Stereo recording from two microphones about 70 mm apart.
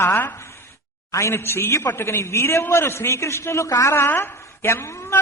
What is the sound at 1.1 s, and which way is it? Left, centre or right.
A woman's voice, left.